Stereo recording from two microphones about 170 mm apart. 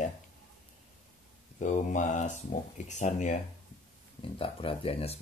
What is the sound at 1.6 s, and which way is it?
Speech, 45° left (ahead or behind).